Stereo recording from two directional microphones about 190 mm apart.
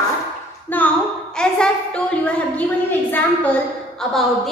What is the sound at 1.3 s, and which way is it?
A woman's voice, 5° left (ahead or behind).